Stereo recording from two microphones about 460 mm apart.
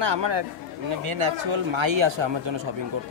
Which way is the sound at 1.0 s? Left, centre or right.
Right.